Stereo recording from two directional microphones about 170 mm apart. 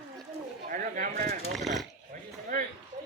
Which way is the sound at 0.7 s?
55° right (ahead or behind).